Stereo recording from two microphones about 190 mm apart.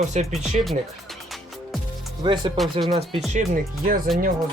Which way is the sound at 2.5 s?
Centre (ahead or behind).